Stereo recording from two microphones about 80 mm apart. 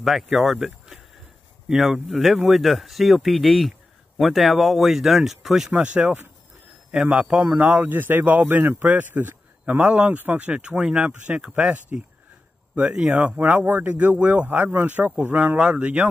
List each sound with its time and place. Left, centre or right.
0.0 s speech: centre